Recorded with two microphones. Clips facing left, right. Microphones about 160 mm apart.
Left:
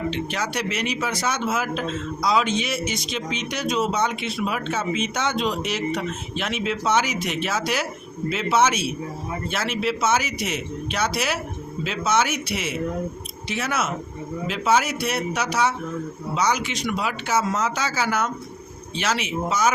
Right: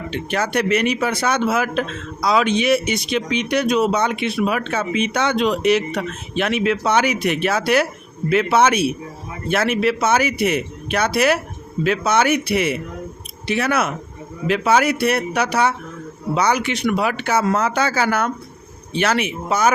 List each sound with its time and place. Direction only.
0.1 s speech: 55° right (ahead or behind)